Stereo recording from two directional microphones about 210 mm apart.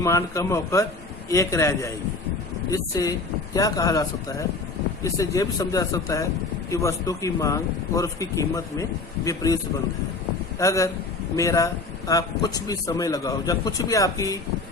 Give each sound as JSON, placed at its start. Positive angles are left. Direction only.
{"t": 0.0, "sound": "a man's voice", "side_deg": 15}
{"t": 10.6, "sound": "a man's voice", "side_deg": 15}